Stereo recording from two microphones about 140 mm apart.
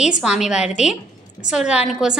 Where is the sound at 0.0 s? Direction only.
5° right (ahead or behind).